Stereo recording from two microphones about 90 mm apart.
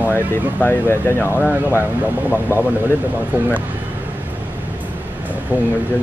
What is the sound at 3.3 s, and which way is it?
Speech, 20° right (ahead or behind).